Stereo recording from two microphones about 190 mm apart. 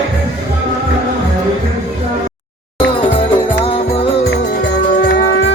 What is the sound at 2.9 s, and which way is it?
Music, 30° left (ahead or behind).